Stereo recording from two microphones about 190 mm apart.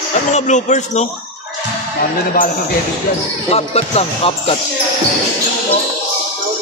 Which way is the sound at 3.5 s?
35° left (ahead or behind).